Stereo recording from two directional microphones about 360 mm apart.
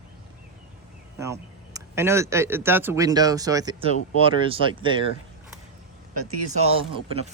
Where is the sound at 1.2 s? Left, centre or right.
Centre.